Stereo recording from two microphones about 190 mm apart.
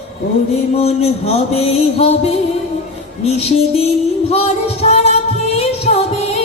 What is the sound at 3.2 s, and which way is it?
Music, 35° left (ahead or behind).